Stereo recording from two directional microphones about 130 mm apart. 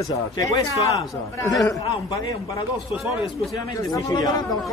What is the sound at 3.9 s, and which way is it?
Speech, 30° left (ahead or behind).